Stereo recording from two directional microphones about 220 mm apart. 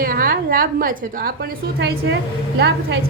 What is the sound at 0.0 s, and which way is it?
A woman's voice, 40° right (ahead or behind).